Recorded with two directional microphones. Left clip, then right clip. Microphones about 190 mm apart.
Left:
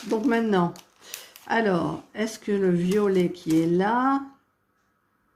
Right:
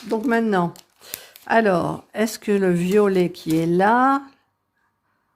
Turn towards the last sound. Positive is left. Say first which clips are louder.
# right 6 dB
turn(degrees=-50)  # may be behind; listen again after turning